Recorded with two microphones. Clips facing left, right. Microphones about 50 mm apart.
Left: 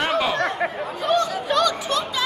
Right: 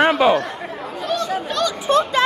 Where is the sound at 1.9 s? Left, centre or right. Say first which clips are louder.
Right 7 dB; right.